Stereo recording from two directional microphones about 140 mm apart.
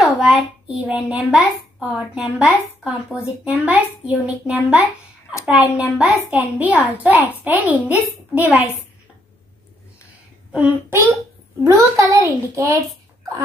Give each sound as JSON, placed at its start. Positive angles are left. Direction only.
{"t": 0.0, "sound": "a child's voice", "side_deg": -5}
{"t": 10.5, "sound": "a child's voice", "side_deg": -10}
{"t": 11.6, "sound": "a child's voice", "side_deg": -25}